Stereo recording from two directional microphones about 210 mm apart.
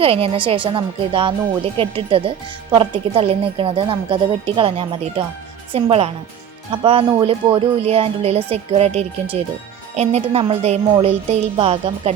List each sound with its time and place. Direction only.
0.0 s speech: 25° right (ahead or behind)